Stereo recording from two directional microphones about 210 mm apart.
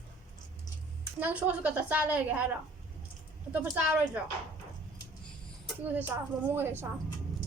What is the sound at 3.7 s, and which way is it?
Speech, 5° right (ahead or behind).